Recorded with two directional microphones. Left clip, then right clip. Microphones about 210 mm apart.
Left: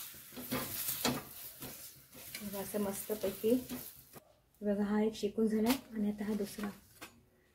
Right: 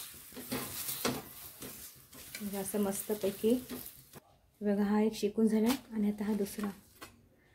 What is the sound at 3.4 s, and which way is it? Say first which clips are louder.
Speech: right 1 dB; 60° right (ahead or behind).